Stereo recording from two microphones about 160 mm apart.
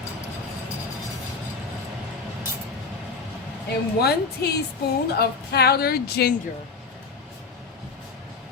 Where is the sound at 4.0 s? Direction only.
90° left.